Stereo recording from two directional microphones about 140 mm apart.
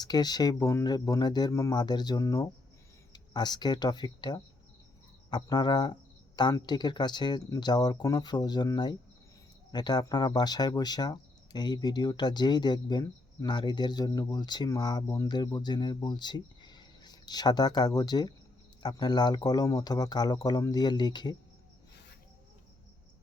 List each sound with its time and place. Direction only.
0.0 s speech: 30° left (ahead or behind)